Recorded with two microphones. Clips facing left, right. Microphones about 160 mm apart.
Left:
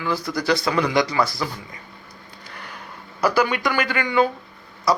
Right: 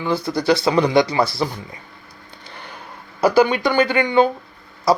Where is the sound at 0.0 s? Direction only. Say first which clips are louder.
Right 4 dB; 25° right (ahead or behind).